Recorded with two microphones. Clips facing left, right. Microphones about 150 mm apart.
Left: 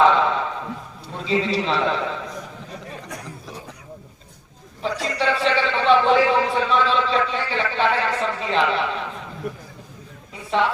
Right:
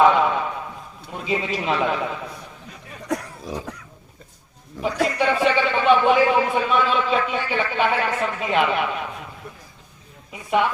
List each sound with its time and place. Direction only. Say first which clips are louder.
0.0 s a sound: right 1 dB; 10° right (ahead or behind)
1.5 s a man's voice: left 1 dB; 10° right (ahead or behind)
3.1 s a sound: right 8 dB; 90° right
4.8 s a man's voice: right 1 dB; 90° right
5.1 s a man's voice: left 1 dB; 10° right (ahead or behind)
9.4 s a man's voice: left 10 dB; 70° left (ahead or behind)
10.5 s a man's voice: right 1 dB; 15° right (ahead or behind)